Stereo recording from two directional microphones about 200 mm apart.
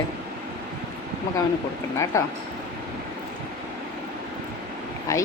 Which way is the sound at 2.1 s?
15° left (ahead or behind).